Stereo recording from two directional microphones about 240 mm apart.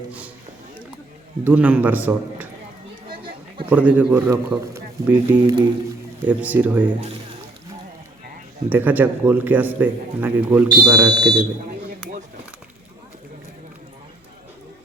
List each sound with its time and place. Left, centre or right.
1.5 s a man's voice: centre
3.7 s a man's voice: centre
8.7 s a man's voice: centre